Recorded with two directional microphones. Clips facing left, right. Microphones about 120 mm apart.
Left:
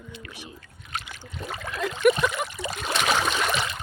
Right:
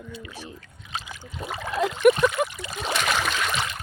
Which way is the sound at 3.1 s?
20° left (ahead or behind).